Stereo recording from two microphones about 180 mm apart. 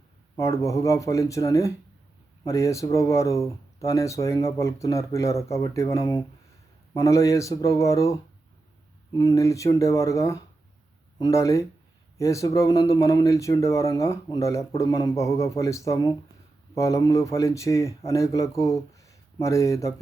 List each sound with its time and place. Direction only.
0.3 s speech: 15° left (ahead or behind)